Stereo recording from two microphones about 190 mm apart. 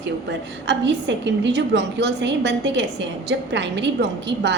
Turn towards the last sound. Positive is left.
turn(degrees=-65)  # may be behind; listen again after turning